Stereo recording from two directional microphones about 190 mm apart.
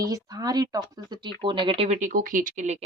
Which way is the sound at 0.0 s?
20° right (ahead or behind).